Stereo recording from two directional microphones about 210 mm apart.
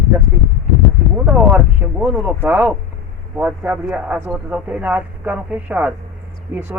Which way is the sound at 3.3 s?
5° right (ahead or behind).